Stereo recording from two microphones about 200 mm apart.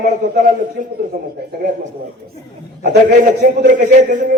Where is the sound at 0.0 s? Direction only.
40° right (ahead or behind).